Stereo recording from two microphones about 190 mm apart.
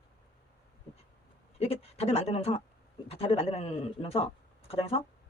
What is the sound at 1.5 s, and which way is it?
Speech, 30° left (ahead or behind).